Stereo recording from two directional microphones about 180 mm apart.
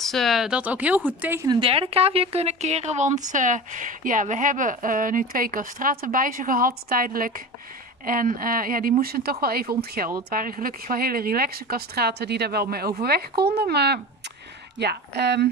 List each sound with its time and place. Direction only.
0.0 s speech: centre (ahead or behind)
1.5 s speech: 30° right (ahead or behind); by 15.5 s 70° right (ahead or behind)